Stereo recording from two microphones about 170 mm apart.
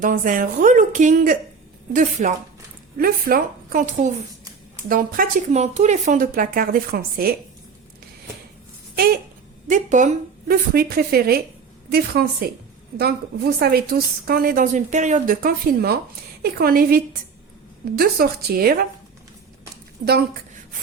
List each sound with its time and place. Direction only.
0.0 s a woman's voice: 50° right (ahead or behind)
5.5 s speech: 40° right (ahead or behind); by 7.3 s 60° right (ahead or behind)
9.6 s a woman's voice: 45° right (ahead or behind)
10.5 s a woman's voice: 60° right (ahead or behind)